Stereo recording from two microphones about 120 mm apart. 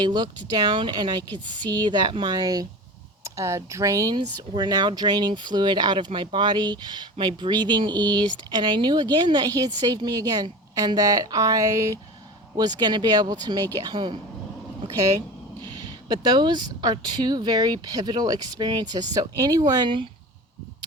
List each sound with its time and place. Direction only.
0.0 s speech: 40° right (ahead or behind)
4.1 s speech: 40° right (ahead or behind)
15.6 s speech: 35° right (ahead or behind)